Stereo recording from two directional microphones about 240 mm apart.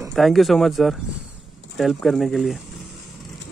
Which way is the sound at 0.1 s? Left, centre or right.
Centre.